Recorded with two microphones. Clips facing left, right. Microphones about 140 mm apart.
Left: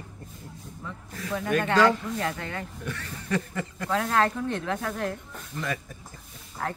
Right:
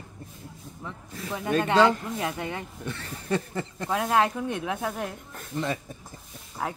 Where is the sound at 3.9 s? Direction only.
15° right (ahead or behind).